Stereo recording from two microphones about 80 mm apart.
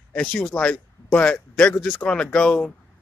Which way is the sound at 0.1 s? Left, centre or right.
Centre.